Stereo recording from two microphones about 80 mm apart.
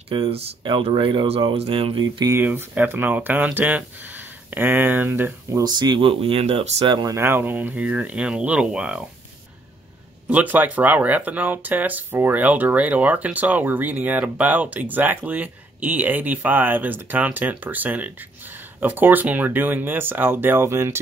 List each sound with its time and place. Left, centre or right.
0.1 s speech: right
2.3 s speech: right
5.6 s speech: right
7.2 s speech: right; by 9.0 s centre
10.2 s speech: centre